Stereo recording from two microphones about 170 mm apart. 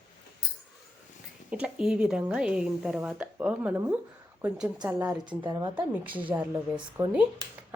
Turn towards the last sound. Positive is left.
turn(degrees=-5)  # may be behind; listen again after turning